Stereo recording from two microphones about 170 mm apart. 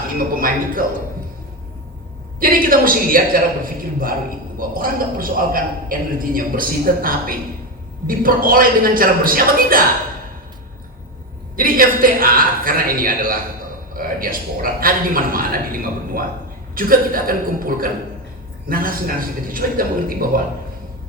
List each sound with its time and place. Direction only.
0.2 s a man's voice: 55° right (ahead or behind)
2.4 s a man's voice: 55° right (ahead or behind)
4.5 s a man's voice: 55° right (ahead or behind)
11.5 s a man's voice: 55° right (ahead or behind)